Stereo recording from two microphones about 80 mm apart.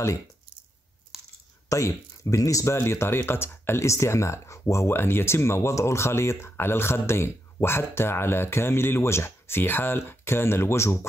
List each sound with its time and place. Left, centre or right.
1.7 s speech: left